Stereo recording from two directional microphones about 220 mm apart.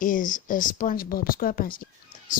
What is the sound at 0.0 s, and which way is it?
Speech, 35° left (ahead or behind).